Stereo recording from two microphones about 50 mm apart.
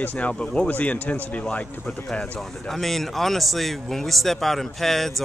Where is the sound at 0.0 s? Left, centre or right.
Left.